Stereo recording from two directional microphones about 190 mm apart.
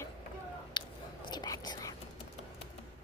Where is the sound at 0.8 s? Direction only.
25° left (ahead or behind).